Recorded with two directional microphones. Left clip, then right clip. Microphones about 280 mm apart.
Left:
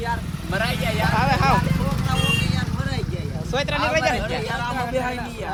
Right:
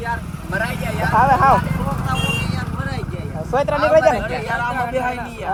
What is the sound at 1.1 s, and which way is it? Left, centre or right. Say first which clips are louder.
Speech: right 9 dB; centre.